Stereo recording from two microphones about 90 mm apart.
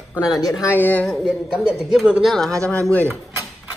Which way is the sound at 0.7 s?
20° left (ahead or behind).